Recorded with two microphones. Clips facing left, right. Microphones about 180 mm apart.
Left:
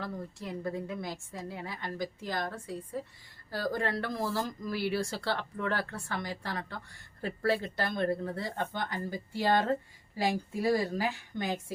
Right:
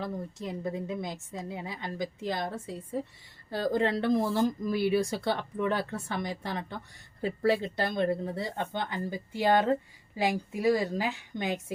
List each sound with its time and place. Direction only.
0.0 s speech: 20° right (ahead or behind)